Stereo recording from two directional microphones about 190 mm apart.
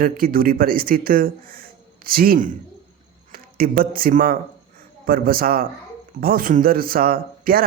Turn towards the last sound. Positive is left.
turn(degrees=-50)  # may be behind; listen again after turning